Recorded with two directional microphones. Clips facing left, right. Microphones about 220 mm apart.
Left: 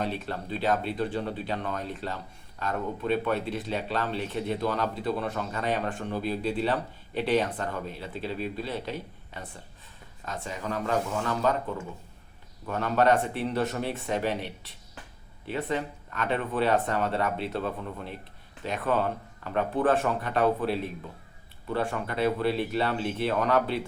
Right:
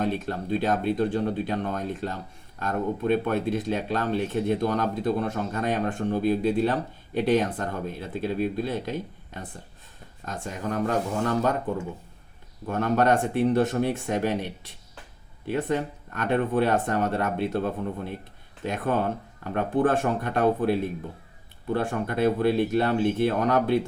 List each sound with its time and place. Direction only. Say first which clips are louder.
0.0 s speech: right 4 dB; 45° right (ahead or behind)
12.6 s speech: right 2 dB; 50° right (ahead or behind)
15.5 s speech: right 4 dB; 45° right (ahead or behind)